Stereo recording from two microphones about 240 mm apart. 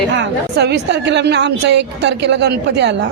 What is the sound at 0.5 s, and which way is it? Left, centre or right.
A woman's voice, right.